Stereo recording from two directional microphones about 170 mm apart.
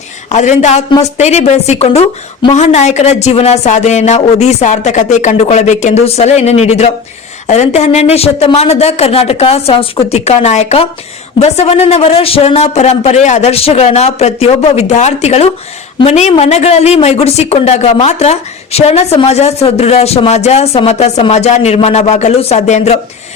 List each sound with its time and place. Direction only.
0.3 s speech: 45° left (ahead or behind)